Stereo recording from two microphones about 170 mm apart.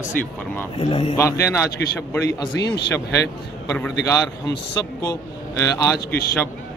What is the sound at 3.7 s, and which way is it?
Speech, 15° left (ahead or behind).